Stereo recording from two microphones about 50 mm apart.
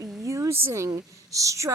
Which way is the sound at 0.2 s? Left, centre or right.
Right.